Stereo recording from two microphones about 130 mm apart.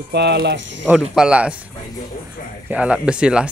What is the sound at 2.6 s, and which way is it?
Speech, 10° right (ahead or behind).